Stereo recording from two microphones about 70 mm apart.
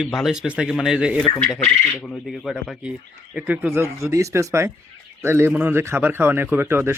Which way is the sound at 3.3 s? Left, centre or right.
Centre.